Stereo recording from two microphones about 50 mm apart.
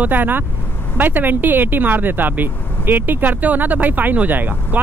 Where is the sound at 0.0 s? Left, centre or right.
Right.